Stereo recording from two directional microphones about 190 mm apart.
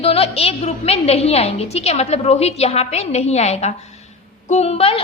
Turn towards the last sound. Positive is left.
turn(degrees=30)  # may be behind; listen again after turning